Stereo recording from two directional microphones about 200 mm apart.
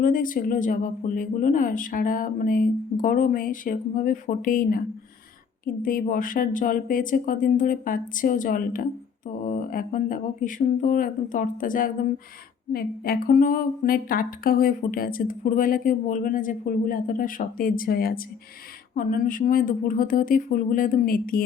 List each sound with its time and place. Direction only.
0.0 s a woman's voice: 45° left (ahead or behind)